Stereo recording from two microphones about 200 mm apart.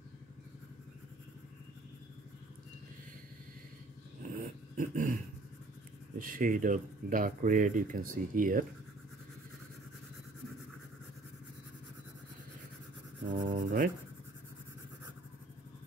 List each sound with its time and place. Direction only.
4.7 s a sound: 45° right (ahead or behind)
6.1 s speech: 45° right (ahead or behind)
13.3 s writing: 40° right (ahead or behind)